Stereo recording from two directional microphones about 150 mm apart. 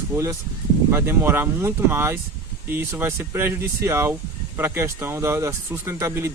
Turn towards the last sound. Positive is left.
turn(degrees=-15)  # may be behind; listen again after turning